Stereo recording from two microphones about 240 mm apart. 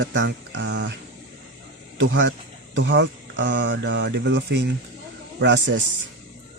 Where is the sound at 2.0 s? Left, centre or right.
Right.